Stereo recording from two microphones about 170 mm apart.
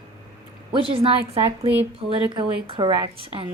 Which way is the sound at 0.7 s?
30° right (ahead or behind).